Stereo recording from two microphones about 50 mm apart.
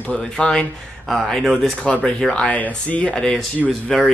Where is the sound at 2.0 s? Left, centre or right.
Centre.